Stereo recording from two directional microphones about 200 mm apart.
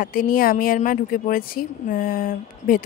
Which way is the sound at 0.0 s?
45° left (ahead or behind).